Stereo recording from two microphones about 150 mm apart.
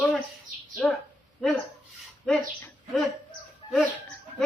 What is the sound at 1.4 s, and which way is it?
Speech, 5° left (ahead or behind).